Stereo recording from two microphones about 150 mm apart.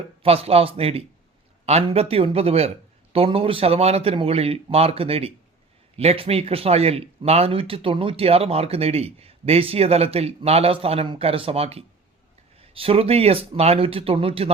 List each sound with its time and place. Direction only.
0.2 s speech: 40° right (ahead or behind)